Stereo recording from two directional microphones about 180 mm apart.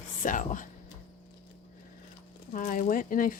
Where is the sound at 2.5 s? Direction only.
45° left (ahead or behind).